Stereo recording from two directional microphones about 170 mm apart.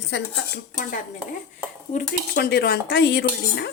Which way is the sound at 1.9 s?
65° left (ahead or behind).